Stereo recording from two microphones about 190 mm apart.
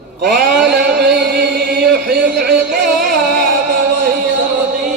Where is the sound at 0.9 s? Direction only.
55° right (ahead or behind).